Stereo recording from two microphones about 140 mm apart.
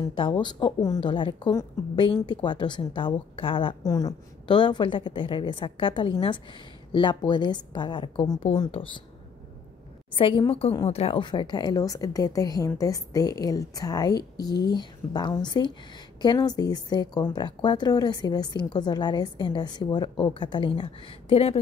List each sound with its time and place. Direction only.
0.1 s speech: 40° left (ahead or behind)
3.8 s speech: 25° left (ahead or behind)
10.1 s a woman's voice: 35° left (ahead or behind)